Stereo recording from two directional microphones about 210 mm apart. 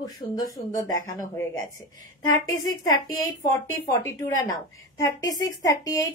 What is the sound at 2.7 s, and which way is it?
Speech, 15° left (ahead or behind).